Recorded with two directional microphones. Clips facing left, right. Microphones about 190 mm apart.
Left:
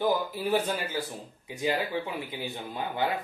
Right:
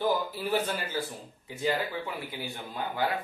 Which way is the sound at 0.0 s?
15° left (ahead or behind).